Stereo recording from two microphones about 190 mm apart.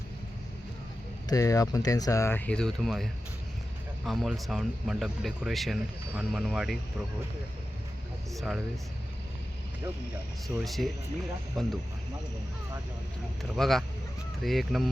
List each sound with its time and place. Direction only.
1.3 s speech: 15° left (ahead or behind); by 6.7 s centre (ahead or behind)
8.4 s speech: centre (ahead or behind)
10.6 s speech: centre (ahead or behind)
13.4 s speech: centre (ahead or behind)